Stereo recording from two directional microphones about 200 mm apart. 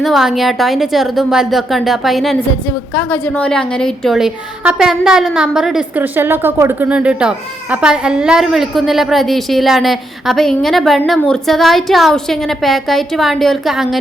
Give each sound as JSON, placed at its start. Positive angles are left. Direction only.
{"t": 0.0, "sound": "a woman's voice", "side_deg": 0}